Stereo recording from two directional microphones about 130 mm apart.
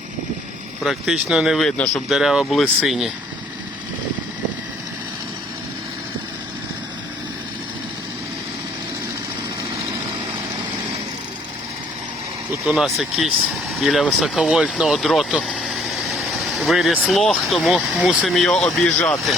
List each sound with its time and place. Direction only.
0.9 s speech: 5° right (ahead or behind)
12.6 s speech: centre (ahead or behind)